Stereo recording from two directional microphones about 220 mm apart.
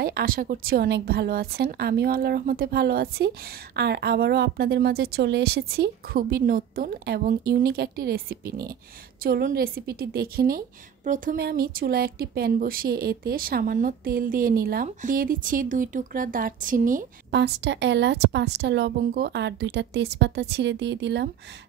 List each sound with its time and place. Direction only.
0.0 s a woman's voice: 40° right (ahead or behind)
17.4 s a woman's voice: 55° right (ahead or behind)